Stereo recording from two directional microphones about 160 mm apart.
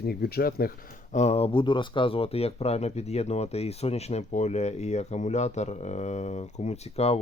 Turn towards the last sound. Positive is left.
turn(degrees=40)  # may be behind; listen again after turning